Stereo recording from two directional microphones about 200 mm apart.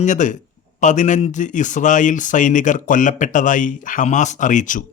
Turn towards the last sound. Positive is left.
turn(degrees=40)  # may be behind; listen again after turning